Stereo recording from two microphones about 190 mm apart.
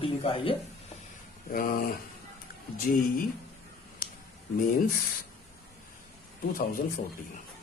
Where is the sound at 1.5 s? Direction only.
50° left (ahead or behind).